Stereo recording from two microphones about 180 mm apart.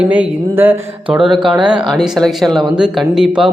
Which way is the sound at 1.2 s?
25° right (ahead or behind).